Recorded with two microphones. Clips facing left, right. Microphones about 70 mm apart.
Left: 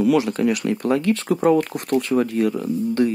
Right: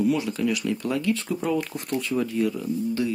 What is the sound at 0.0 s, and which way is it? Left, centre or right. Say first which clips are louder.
Speech: left 6 dB; left.